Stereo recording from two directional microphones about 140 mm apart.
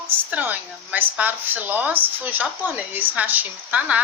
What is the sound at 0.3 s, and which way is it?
A woman's voice, 10° right (ahead or behind).